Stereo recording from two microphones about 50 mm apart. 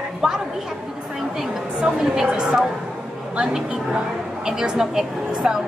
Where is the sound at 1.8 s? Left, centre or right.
Centre.